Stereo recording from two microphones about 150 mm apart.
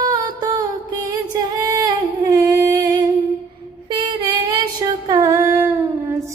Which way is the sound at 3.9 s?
30° right (ahead or behind).